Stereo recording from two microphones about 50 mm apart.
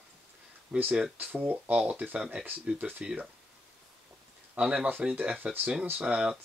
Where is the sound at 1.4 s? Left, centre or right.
Right.